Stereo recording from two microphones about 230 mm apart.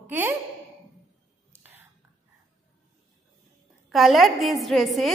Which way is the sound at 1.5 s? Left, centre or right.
Centre.